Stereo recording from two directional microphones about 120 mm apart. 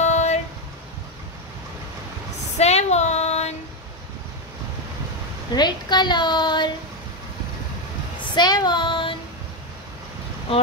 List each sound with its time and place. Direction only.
0.0 s music: 70° left (ahead or behind)
2.5 s female singing: 65° left (ahead or behind)
5.5 s a woman's voice: 35° left (ahead or behind)
8.4 s child singing: 35° left (ahead or behind)